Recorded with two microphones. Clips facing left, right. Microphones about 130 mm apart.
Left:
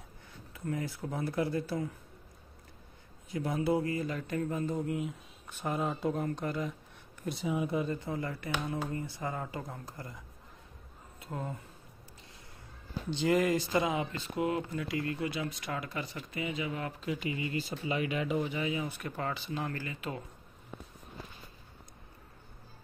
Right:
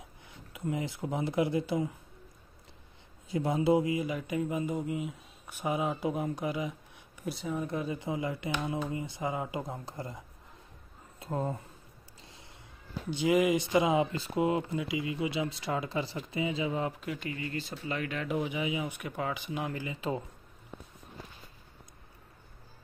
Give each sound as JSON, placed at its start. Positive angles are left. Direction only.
{"t": 0.5, "sound": "speech", "side_deg": -15}
{"t": 3.3, "sound": "speech", "side_deg": -25}
{"t": 7.9, "sound": "speech", "side_deg": -15}
{"t": 13.1, "sound": "speech", "side_deg": -10}
{"t": 15.0, "sound": "speech", "side_deg": -10}
{"t": 15.2, "sound": "speech", "side_deg": -25}
{"t": 17.0, "sound": "speech", "side_deg": 0}
{"t": 17.3, "sound": "speech", "side_deg": 15}
{"t": 18.3, "sound": "speech", "side_deg": -10}